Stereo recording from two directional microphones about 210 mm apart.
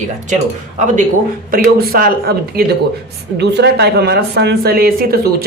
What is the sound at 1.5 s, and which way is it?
Speech, 45° right (ahead or behind).